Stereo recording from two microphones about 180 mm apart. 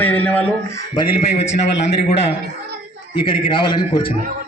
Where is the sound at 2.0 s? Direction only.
35° left (ahead or behind).